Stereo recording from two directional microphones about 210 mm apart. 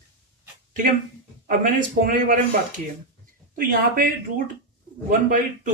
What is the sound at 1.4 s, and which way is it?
Speech, 40° right (ahead or behind).